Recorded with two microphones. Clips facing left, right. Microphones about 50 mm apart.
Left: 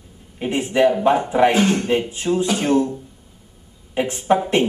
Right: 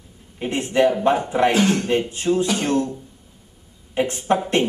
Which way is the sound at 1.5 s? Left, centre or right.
Centre.